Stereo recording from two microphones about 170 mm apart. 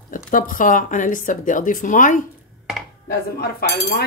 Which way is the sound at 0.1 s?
55° left (ahead or behind).